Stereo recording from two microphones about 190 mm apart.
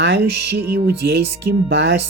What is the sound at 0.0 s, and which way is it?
Speech, 60° right (ahead or behind).